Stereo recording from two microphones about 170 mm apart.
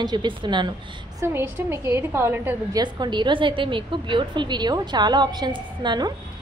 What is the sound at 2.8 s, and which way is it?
A woman's voice, 25° right (ahead or behind).